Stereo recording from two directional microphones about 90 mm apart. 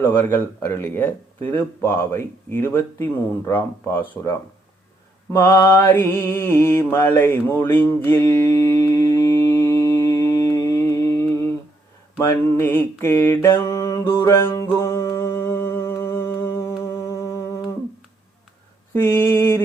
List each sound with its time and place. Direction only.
0.0 s speech: 25° left (ahead or behind)
5.4 s speech: 30° left (ahead or behind)
8.2 s mantra: 35° left (ahead or behind)
9.5 s a sound: 30° left (ahead or behind)
12.2 s speech: 25° left (ahead or behind)
14.7 s humming: 30° left (ahead or behind)
18.9 s speech: 30° left (ahead or behind)